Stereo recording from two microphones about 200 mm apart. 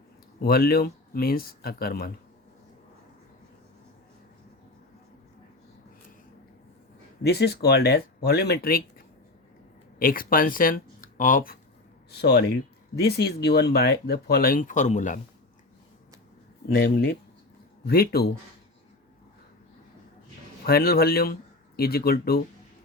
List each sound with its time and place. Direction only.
0.4 s speech: 50° left (ahead or behind)
7.2 s speech: 55° left (ahead or behind)
12.1 s speech: 55° left (ahead or behind); by 15.2 s 35° left (ahead or behind)
16.7 s speech: 55° left (ahead or behind)
20.7 s speech: 50° left (ahead or behind)